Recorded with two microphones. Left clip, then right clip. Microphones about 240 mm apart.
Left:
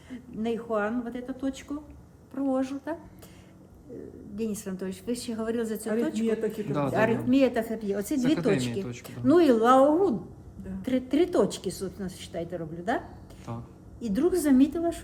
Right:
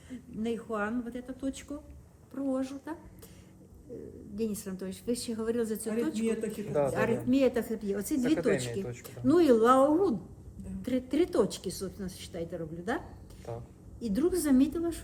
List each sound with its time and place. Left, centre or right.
0.1 s a woman's voice: centre
4.4 s a woman's voice: centre
14.0 s a woman's voice: centre